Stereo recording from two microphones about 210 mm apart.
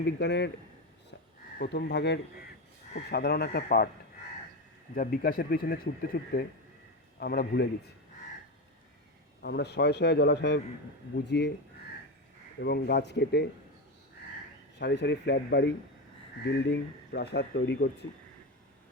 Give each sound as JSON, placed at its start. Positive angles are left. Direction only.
{"t": 0.0, "sound": "speech", "side_deg": 55}
{"t": 1.5, "sound": "speech", "side_deg": 50}
{"t": 4.9, "sound": "speech", "side_deg": 45}
{"t": 9.4, "sound": "speech", "side_deg": 55}
{"t": 12.5, "sound": "speech", "side_deg": 50}
{"t": 14.8, "sound": "speech", "side_deg": 55}